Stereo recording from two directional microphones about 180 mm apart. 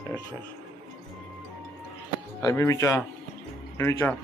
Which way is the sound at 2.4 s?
20° left (ahead or behind).